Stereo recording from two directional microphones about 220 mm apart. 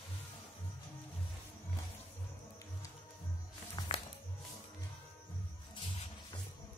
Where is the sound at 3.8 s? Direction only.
20° left (ahead or behind).